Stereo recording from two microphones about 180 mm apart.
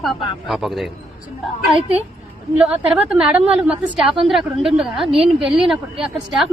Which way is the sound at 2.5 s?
5° right (ahead or behind).